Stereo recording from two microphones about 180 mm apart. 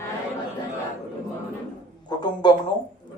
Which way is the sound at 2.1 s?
25° left (ahead or behind).